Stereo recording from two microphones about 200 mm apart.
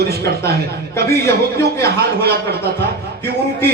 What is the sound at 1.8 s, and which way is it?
Speech, 55° right (ahead or behind).